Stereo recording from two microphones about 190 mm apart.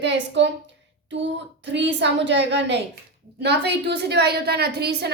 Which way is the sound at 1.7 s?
70° right (ahead or behind).